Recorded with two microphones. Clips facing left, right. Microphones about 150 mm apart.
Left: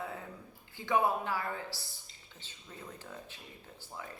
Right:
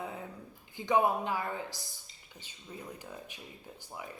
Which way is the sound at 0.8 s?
20° right (ahead or behind).